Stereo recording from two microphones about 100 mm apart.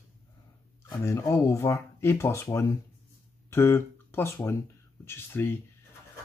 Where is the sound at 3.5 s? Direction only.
25° left (ahead or behind).